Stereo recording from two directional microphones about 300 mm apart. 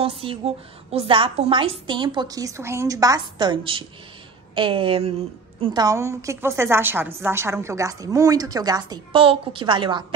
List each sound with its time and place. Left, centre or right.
0.0 s a woman's voice: centre